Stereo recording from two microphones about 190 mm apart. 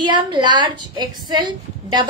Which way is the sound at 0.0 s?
25° right (ahead or behind).